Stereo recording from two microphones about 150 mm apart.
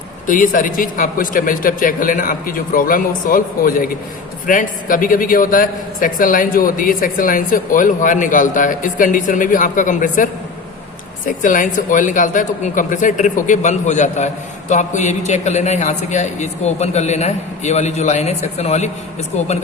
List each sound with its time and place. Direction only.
0.3 s a man's voice: 65° left (ahead or behind)
11.3 s a man's voice: 60° left (ahead or behind)